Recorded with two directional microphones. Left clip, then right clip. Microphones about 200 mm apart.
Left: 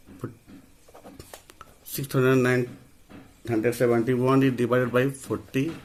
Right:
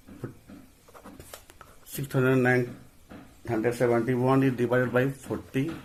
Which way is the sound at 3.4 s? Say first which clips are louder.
Left 2 dB; 50° left (ahead or behind).